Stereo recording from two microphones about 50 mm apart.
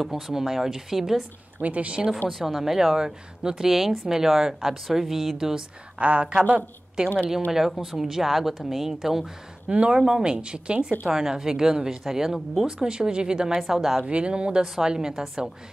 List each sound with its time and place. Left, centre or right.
0.0 s speech: centre
1.6 s speech: right
2.2 s speech: centre
5.9 s speech: right
7.5 s speech: centre
9.7 s speech: right
9.9 s speech: centre
11.1 s speech: centre
13.5 s speech: centre
14.0 s speech: right